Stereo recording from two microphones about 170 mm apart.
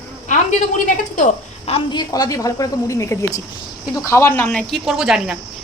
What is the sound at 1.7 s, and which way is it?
A woman's voice, 25° left (ahead or behind).